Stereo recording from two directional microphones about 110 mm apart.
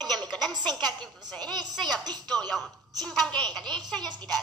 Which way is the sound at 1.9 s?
40° right (ahead or behind).